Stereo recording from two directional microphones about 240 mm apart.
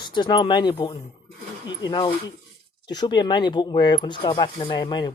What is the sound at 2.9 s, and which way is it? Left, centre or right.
Speech, centre.